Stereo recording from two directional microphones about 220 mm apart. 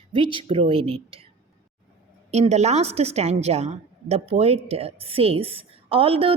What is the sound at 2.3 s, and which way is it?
A woman's voice, 30° right (ahead or behind).